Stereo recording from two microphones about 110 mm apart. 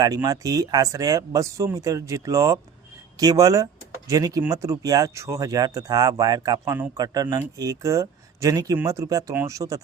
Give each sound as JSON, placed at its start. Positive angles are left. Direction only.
{"t": 0.0, "sound": "speech", "side_deg": -35}